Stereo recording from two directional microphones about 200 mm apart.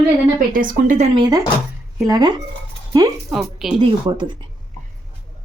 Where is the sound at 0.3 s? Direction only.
45° right (ahead or behind).